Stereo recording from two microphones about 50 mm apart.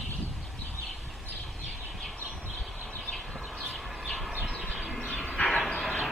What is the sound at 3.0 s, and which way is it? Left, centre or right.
Vehicle, centre.